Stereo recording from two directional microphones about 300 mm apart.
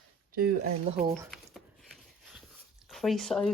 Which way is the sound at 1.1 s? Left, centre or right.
Centre.